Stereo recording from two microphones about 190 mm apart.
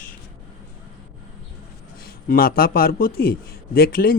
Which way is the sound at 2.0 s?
50° left (ahead or behind).